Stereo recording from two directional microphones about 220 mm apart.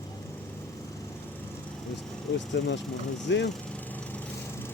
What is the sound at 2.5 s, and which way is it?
Speech, 55° left (ahead or behind).